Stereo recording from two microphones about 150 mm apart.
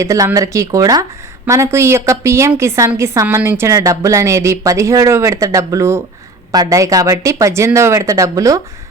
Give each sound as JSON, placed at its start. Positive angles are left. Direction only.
{"t": 0.0, "sound": "a woman's voice", "side_deg": -20}